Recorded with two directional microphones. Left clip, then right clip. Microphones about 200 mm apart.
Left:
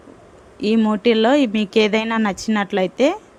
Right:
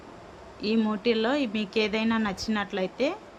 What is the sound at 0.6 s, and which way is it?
A woman's voice, 45° left (ahead or behind).